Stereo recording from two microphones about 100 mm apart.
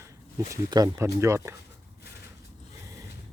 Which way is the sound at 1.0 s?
30° right (ahead or behind).